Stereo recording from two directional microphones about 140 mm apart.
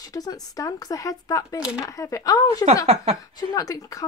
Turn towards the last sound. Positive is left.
turn(degrees=25)  # may be behind; listen again after turning